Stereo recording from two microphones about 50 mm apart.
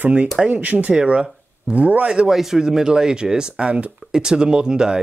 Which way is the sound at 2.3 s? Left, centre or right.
Centre.